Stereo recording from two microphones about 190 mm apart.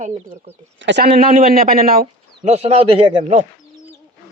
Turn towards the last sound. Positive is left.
turn(degrees=-30)  # may be behind; listen again after turning